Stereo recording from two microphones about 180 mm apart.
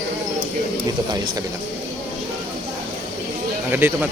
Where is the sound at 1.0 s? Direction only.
25° right (ahead or behind).